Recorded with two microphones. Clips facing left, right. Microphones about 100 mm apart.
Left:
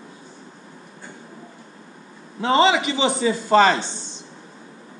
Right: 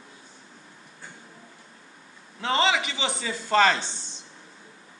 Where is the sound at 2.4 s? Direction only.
20° left (ahead or behind).